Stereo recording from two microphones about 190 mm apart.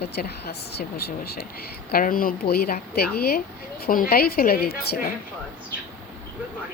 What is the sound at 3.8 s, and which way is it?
A woman's voice, 50° left (ahead or behind).